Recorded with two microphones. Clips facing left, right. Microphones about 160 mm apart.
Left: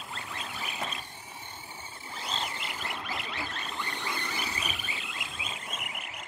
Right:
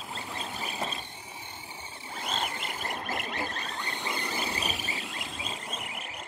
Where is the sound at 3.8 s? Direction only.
25° right (ahead or behind).